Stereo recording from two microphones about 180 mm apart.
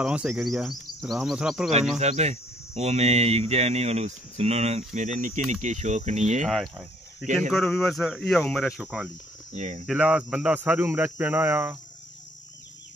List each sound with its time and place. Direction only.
0.0 s speech: 5° right (ahead or behind)
2.0 s cricket: 40° right (ahead or behind)
6.4 s speech: centre (ahead or behind)
9.5 s cricket: 40° right (ahead or behind)
9.8 s speech: 5° right (ahead or behind)